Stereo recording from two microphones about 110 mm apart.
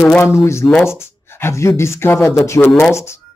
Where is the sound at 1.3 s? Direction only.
25° left (ahead or behind).